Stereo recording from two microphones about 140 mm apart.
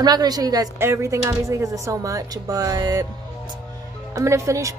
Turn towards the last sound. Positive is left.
turn(degrees=-20)  # may be behind; listen again after turning